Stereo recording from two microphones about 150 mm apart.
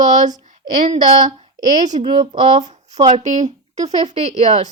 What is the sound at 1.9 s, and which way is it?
Speech, 40° right (ahead or behind).